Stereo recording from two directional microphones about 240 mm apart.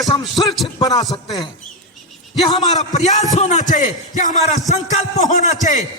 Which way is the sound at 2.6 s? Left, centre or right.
Left.